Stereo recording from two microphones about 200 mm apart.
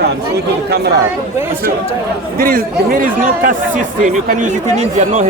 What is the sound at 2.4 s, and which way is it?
A man's voice, 45° right (ahead or behind).